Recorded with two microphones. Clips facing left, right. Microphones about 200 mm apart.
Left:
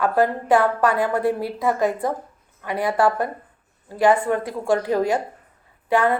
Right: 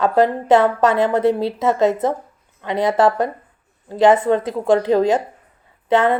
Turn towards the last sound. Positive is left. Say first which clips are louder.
# right 3 dB
turn(degrees=-20)  # may be behind; listen again after turning